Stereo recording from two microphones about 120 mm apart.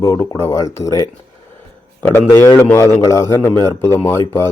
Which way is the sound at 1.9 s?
15° left (ahead or behind).